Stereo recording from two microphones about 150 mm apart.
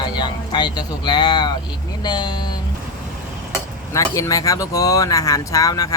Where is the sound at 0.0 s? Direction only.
30° left (ahead or behind).